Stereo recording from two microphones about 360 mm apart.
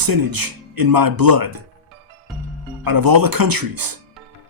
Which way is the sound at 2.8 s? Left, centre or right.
Right.